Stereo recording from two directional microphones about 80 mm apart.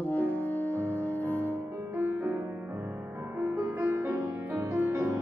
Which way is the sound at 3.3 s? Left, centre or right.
Right.